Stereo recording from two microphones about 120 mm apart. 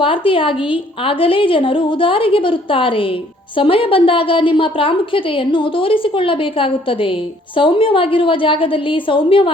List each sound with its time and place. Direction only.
0.0 s a woman's voice: 45° left (ahead or behind)